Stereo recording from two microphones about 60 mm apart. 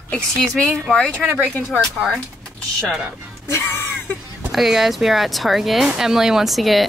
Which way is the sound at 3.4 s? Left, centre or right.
Left.